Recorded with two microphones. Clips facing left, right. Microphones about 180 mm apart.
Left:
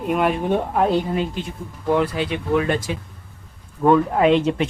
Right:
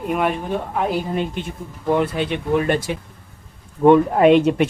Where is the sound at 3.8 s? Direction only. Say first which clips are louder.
Right 3 dB; 15° right (ahead or behind).